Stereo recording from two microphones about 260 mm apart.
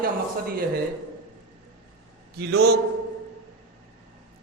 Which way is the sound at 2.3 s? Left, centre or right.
Right.